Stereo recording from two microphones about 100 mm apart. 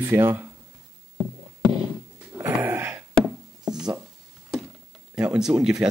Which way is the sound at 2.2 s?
20° right (ahead or behind).